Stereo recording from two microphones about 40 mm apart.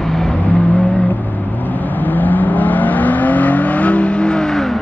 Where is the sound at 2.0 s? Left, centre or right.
Left.